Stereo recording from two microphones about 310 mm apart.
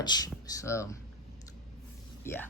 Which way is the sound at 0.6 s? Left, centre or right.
Centre.